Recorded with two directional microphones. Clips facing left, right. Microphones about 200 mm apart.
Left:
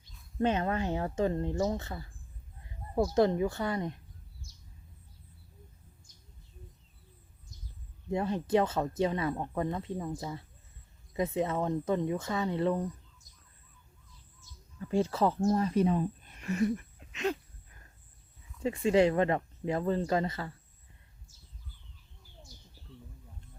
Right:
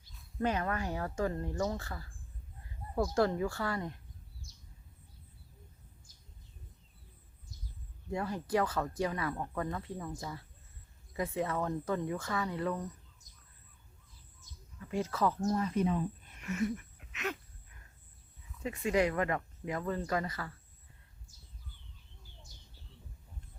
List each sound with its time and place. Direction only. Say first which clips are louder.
0.0 s speech: left 4 dB; 25° left (ahead or behind)
8.1 s speech: left 5 dB; 25° left (ahead or behind)
14.8 s speech: left 5 dB; 30° left (ahead or behind)
18.6 s speech: left 5 dB; 30° left (ahead or behind)